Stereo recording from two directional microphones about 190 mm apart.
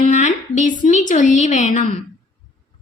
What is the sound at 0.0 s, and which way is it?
A woman's voice, 40° left (ahead or behind).